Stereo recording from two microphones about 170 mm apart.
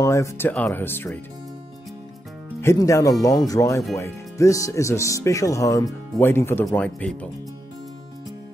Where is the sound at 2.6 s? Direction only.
15° left (ahead or behind).